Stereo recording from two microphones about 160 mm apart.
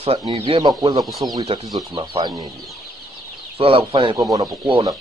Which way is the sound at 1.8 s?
30° right (ahead or behind).